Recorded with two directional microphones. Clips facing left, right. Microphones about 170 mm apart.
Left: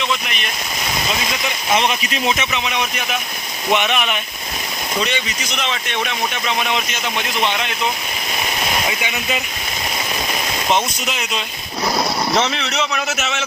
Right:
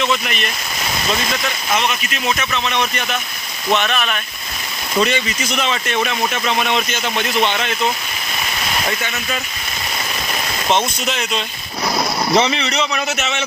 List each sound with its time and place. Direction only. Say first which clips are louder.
1.7 s speech: left 3 dB; 30° left (ahead or behind)
2.5 s speech: right 2 dB; 10° left (ahead or behind)
6.6 s speech: right 2 dB; centre (ahead or behind)
8.9 s speech: even; 10° left (ahead or behind)
10.7 s speech: right 2 dB; 5° left (ahead or behind)